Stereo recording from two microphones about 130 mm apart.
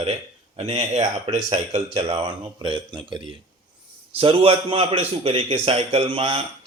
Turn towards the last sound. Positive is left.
turn(degrees=-45)  # may be behind; listen again after turning